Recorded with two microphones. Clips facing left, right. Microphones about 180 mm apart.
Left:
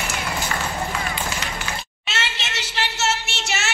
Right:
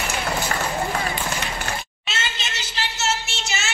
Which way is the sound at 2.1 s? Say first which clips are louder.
Left 2 dB; 70° left (ahead or behind).